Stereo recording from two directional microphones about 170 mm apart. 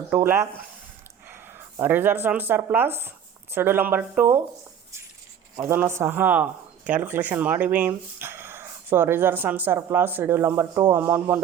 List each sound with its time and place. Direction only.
0.1 s a man's voice: 15° right (ahead or behind)
1.8 s a man's voice: 10° right (ahead or behind)
5.5 s a man's voice: 15° right (ahead or behind)